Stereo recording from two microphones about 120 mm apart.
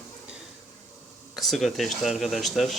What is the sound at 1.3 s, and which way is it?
Speech, centre (ahead or behind).